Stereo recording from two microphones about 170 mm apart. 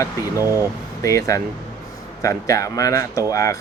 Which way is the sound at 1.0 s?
20° left (ahead or behind).